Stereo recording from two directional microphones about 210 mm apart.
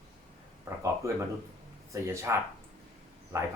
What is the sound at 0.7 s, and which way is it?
Speech, 10° right (ahead or behind).